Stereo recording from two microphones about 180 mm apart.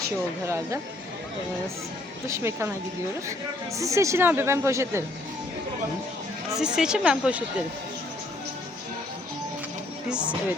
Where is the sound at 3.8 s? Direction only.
15° right (ahead or behind).